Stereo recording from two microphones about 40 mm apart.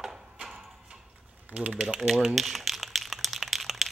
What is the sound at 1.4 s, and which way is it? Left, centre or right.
Speech, right.